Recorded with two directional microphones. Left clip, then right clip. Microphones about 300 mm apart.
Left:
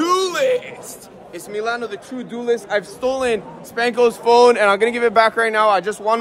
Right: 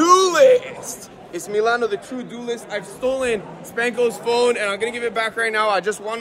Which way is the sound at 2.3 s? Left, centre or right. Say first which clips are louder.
Left 8 dB; centre.